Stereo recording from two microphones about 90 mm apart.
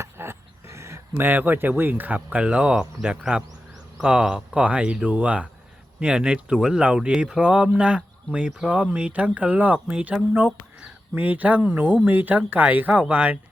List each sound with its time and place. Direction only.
0.0 s speech: 30° right (ahead or behind)